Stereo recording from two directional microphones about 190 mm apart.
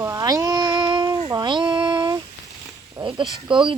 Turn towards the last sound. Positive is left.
turn(degrees=-25)  # may be behind; listen again after turning